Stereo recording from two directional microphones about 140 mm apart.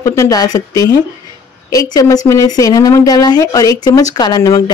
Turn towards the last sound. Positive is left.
turn(degrees=25)  # may be behind; listen again after turning